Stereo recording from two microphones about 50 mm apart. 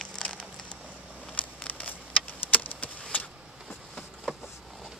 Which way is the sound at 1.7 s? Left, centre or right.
Left.